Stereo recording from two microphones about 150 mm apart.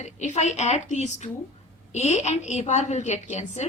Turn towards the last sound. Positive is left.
turn(degrees=50)  # may be behind; listen again after turning